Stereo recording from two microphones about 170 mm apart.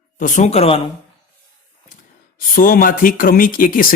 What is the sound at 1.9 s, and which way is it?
Speech, 55° left (ahead or behind).